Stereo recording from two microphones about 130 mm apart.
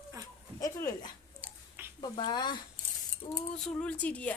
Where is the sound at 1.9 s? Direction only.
40° left (ahead or behind).